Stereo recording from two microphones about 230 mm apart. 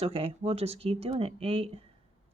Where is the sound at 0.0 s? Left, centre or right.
Right.